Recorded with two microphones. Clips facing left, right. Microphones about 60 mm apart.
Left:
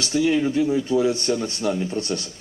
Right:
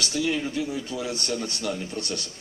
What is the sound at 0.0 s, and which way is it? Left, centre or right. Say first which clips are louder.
Speech: left 6 dB; left.